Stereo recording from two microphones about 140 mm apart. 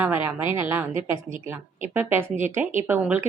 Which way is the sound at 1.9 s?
15° right (ahead or behind).